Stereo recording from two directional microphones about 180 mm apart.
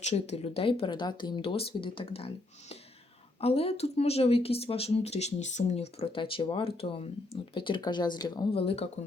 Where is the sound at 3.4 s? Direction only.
35° left (ahead or behind).